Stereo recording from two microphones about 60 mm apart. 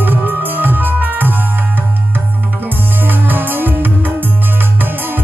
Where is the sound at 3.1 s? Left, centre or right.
Right.